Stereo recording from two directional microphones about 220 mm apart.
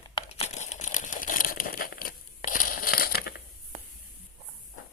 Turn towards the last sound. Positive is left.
turn(degrees=45)  # may be behind; listen again after turning